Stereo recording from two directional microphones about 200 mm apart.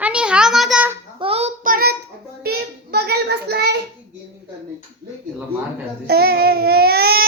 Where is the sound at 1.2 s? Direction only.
30° right (ahead or behind); by 3.7 s 55° right (ahead or behind).